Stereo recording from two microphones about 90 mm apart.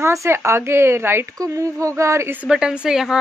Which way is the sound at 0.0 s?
30° right (ahead or behind).